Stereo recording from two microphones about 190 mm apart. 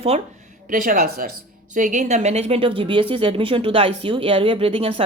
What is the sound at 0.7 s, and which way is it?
Speech, 45° right (ahead or behind).